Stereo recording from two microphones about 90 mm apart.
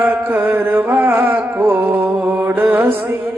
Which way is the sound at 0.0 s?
20° right (ahead or behind).